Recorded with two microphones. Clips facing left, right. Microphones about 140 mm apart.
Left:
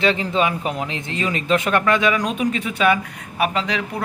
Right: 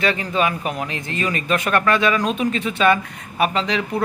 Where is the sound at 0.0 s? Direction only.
20° left (ahead or behind).